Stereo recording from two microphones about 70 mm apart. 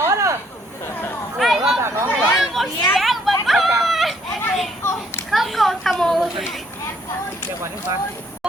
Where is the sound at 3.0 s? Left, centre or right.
Centre.